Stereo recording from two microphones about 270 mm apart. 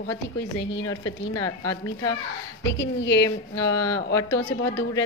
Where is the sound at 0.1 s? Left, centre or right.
Left.